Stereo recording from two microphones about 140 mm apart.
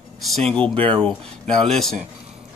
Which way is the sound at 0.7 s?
35° right (ahead or behind).